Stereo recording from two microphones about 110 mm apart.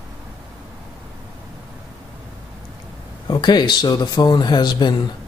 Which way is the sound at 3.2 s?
40° left (ahead or behind).